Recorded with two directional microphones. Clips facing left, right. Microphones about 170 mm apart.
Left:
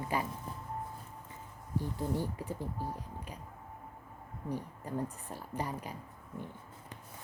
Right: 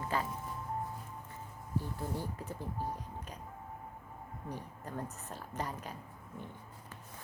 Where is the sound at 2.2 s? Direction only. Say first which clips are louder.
Left 4 dB; 15° left (ahead or behind).